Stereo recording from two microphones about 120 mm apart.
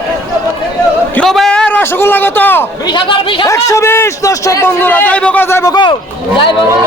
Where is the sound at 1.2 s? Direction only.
Centre (ahead or behind).